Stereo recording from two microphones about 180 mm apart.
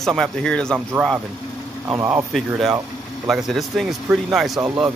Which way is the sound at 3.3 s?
Centre (ahead or behind).